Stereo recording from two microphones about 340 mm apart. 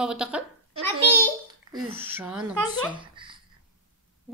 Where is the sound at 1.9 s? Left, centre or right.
Centre.